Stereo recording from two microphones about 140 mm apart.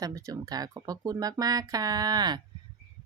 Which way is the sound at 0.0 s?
25° right (ahead or behind).